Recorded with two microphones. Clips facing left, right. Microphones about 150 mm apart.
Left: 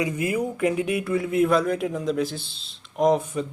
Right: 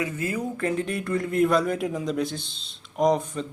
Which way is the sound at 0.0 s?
15° left (ahead or behind).